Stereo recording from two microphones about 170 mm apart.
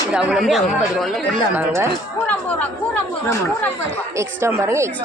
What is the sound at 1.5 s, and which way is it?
Speech, 15° right (ahead or behind).